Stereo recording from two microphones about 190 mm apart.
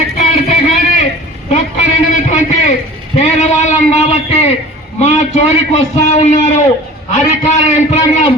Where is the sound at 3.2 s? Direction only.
35° left (ahead or behind).